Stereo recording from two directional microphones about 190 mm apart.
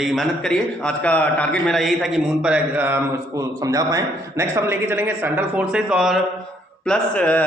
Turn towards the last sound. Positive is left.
turn(degrees=5)  # may be behind; listen again after turning